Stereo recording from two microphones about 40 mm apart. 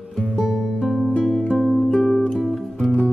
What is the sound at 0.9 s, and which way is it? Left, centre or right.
Music, centre.